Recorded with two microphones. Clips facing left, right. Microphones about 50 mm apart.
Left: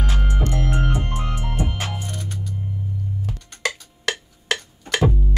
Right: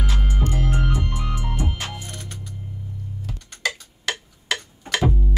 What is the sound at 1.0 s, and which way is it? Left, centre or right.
Music, left.